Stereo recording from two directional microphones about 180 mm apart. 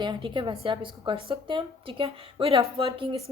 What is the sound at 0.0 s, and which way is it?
Speech, 25° right (ahead or behind).